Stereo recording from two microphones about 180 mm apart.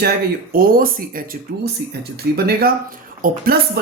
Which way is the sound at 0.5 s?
55° right (ahead or behind).